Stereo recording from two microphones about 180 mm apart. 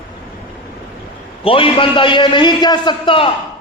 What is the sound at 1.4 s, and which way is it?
A man's voice, 30° left (ahead or behind).